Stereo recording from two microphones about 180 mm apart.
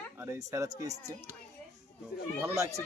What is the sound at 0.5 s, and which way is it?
Speech, 15° right (ahead or behind).